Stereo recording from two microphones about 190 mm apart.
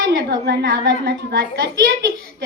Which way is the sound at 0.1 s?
60° right (ahead or behind).